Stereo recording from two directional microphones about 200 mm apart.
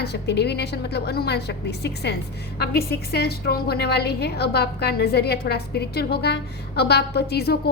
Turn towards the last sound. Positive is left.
turn(degrees=55)  # may be behind; listen again after turning